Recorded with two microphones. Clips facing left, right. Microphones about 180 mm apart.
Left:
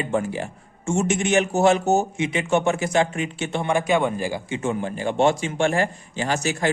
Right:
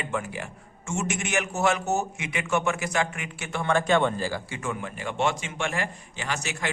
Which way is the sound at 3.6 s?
10° left (ahead or behind).